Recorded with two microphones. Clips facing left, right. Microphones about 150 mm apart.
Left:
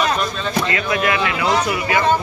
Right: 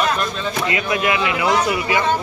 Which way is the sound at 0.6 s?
20° right (ahead or behind).